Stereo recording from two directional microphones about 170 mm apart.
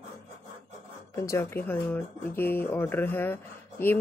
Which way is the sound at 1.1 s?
15° left (ahead or behind).